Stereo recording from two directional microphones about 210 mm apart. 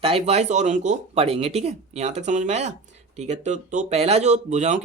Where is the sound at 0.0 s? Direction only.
30° right (ahead or behind).